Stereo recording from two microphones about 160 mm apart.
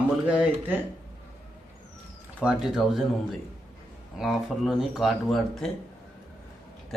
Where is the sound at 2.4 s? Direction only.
5° right (ahead or behind).